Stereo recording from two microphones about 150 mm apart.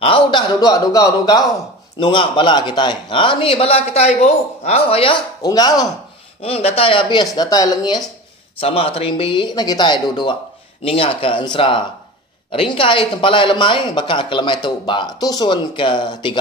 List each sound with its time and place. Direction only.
0.0 s speech: 35° left (ahead or behind)
6.4 s speech: 40° left (ahead or behind); by 8.0 s 25° left (ahead or behind)
8.5 s speech: 40° left (ahead or behind)